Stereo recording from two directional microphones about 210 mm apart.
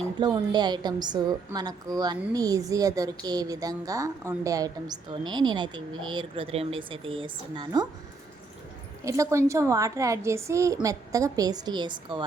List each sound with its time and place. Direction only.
0.2 s a woman's voice: 20° right (ahead or behind)
9.0 s a woman's voice: 15° right (ahead or behind)